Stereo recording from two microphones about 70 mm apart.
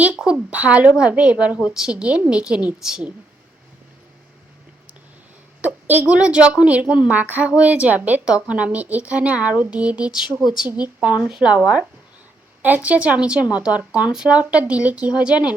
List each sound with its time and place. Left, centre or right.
0.5 s a woman's voice: centre
5.6 s a sound: right
6.1 s a woman's voice: centre
12.6 s a woman's voice: right